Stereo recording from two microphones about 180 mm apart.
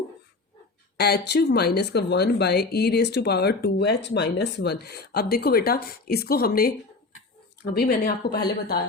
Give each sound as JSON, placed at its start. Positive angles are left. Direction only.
{"t": 0.9, "sound": "speech", "side_deg": 65}